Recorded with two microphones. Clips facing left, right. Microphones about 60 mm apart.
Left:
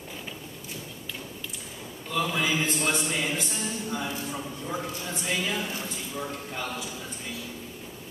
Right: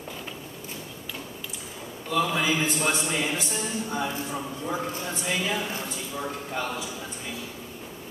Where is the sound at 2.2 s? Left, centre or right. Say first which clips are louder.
Right 2 dB; centre.